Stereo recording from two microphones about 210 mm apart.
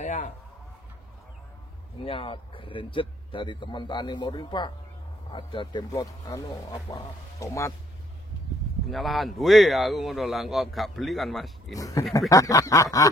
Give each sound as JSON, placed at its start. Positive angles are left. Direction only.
{"t": 0.0, "sound": "a sound", "side_deg": 35}
{"t": 2.0, "sound": "a man's voice", "side_deg": 25}
{"t": 8.9, "sound": "a man's voice", "side_deg": 0}
{"t": 11.7, "sound": "speech", "side_deg": 15}